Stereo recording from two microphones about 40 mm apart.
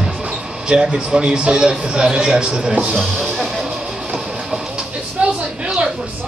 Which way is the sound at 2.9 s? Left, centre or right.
Centre.